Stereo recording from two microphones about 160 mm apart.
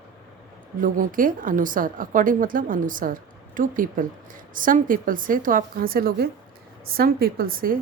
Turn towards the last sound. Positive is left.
turn(degrees=-65)  # may be behind; listen again after turning